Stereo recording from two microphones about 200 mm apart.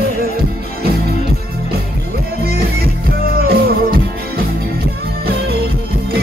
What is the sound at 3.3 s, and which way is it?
Music, 50° right (ahead or behind).